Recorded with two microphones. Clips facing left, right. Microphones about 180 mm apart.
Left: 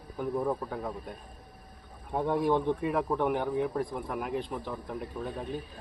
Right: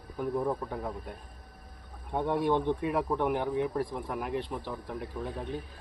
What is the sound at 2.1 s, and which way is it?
Speech, centre (ahead or behind).